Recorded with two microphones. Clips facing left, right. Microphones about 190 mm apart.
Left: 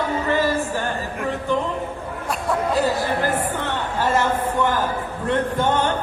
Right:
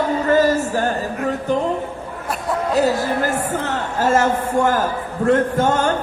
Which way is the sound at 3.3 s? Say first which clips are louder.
Right 2 dB; 45° right (ahead or behind).